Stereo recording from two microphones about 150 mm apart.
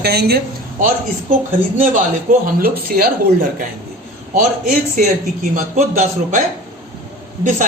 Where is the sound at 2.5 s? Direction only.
80° right.